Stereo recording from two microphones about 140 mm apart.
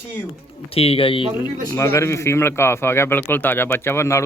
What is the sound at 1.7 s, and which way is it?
A man's voice, 20° left (ahead or behind).